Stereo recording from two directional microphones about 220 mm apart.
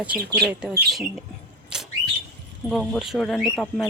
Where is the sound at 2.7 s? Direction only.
Centre (ahead or behind).